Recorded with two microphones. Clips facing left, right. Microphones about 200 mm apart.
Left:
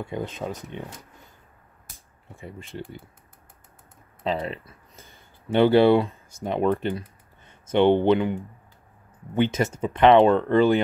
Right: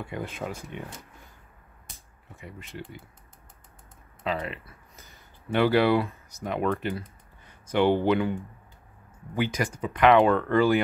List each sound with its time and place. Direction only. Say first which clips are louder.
0.0 s speech: left 3 dB; 25° left (ahead or behind)
2.3 s speech: left 4 dB; 30° left (ahead or behind)
4.2 s speech: left 3 dB; 30° left (ahead or behind)
4.6 s a sound: left 2 dB; 30° left (ahead or behind)
6.4 s speech: left 4 dB; 30° left (ahead or behind)